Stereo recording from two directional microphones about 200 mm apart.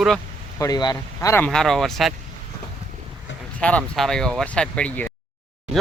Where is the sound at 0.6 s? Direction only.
20° left (ahead or behind).